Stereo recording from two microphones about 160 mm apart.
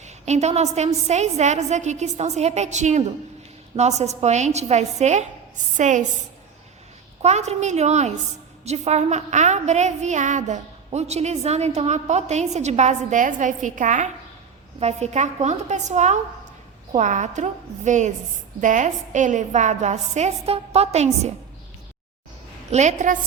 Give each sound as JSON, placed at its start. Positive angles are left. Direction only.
{"t": 0.0, "sound": "a woman's voice", "side_deg": -45}
{"t": 7.2, "sound": "a woman's voice", "side_deg": -45}
{"t": 22.7, "sound": "a woman's voice", "side_deg": -45}